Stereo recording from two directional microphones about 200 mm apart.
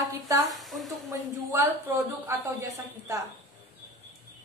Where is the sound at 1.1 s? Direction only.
15° right (ahead or behind).